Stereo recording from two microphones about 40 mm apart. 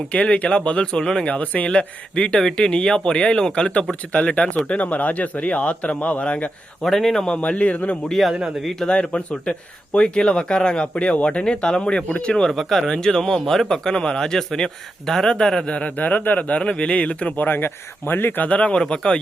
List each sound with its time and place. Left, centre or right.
0.1 s speech: left
1.2 s a man's voice: left
1.8 s a man's voice: left
4.8 s a man's voice: left
6.8 s a man's voice: centre
7.3 s a man's voice: left
8.2 s a man's voice: centre
8.9 s speech: left
12.5 s a man's voice: centre
16.0 s speech: left
16.5 s speech: left
17.3 s speech: left
18.4 s a man's voice: left
18.8 s speech: left